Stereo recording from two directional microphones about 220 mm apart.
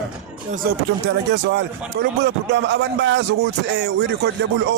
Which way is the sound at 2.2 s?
50° right (ahead or behind).